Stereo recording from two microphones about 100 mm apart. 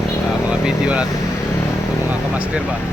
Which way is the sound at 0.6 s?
10° right (ahead or behind).